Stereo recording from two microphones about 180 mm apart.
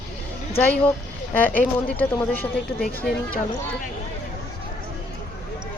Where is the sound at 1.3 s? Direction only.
10° left (ahead or behind).